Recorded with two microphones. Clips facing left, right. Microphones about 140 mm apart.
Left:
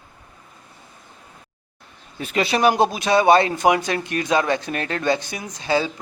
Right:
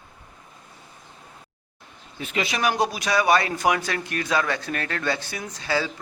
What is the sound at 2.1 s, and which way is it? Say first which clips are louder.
Speech: left 6 dB; 40° left (ahead or behind).